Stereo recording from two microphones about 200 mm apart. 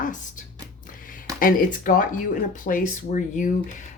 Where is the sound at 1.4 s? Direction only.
45° left (ahead or behind).